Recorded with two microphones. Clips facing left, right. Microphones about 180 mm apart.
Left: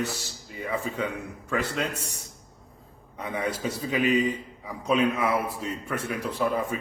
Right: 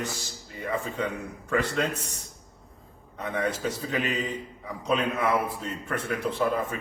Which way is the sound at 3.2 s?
10° left (ahead or behind).